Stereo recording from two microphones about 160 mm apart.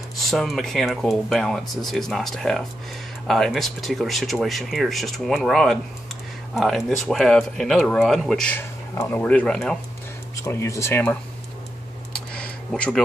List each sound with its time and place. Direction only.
0.3 s speech: centre (ahead or behind)
10.3 s speech: 15° left (ahead or behind)
12.3 s a sound: 5° left (ahead or behind)